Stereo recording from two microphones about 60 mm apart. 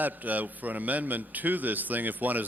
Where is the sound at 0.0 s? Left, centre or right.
Right.